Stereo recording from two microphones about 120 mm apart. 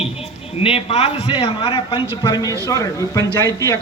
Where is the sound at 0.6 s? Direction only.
55° left (ahead or behind).